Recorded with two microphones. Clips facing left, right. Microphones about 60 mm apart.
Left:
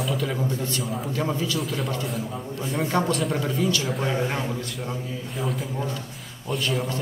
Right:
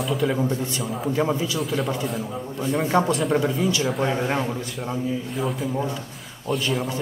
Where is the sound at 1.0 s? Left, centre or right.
Centre.